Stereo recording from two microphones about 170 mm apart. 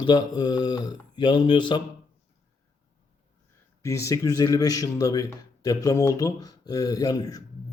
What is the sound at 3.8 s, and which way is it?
Speech, 15° left (ahead or behind).